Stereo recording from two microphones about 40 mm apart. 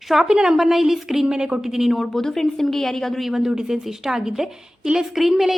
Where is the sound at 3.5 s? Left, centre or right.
Centre.